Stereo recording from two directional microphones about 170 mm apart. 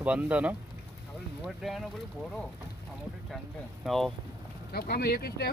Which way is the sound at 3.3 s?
Centre (ahead or behind).